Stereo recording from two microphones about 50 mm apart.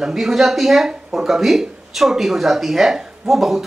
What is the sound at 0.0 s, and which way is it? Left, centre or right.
Speech, centre.